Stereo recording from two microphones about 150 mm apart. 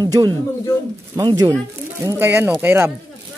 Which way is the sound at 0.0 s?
25° right (ahead or behind).